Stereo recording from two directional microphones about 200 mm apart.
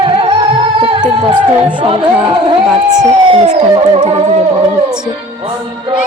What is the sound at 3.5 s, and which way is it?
Music, 30° right (ahead or behind).